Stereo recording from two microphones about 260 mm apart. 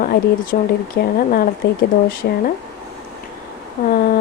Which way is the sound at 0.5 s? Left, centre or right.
Left.